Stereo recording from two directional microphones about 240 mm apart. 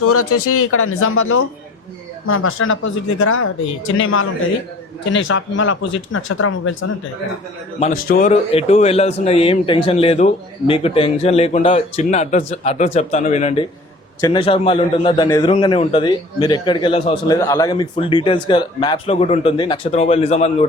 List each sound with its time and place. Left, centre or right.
0.0 s speech: left
7.8 s a man's voice: left